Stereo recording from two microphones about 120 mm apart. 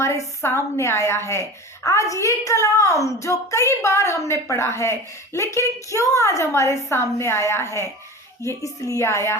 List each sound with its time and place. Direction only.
0.0 s a woman's voice: 25° left (ahead or behind)